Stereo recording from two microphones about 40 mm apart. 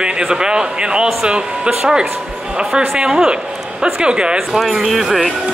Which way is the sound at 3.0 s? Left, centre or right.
Centre.